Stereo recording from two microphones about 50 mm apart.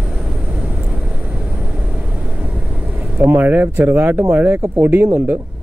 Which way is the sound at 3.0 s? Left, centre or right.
Right.